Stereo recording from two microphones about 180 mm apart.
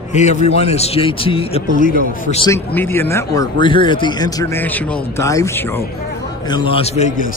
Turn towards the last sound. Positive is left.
turn(degrees=40)  # may be behind; listen again after turning